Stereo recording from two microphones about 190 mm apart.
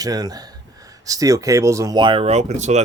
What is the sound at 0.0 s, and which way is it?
A man's voice, 20° right (ahead or behind).